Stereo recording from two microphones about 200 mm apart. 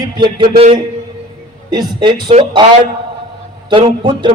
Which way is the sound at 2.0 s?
25° right (ahead or behind).